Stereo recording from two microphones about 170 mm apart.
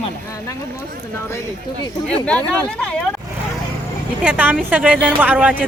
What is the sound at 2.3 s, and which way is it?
Speech, 5° left (ahead or behind).